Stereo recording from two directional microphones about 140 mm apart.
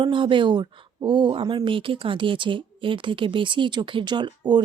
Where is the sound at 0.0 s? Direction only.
35° right (ahead or behind).